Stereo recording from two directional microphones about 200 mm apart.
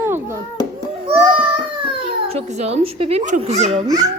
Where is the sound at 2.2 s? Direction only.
30° right (ahead or behind).